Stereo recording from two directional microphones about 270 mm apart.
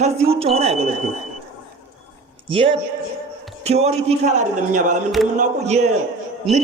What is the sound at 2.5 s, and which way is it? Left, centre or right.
A man's voice, centre.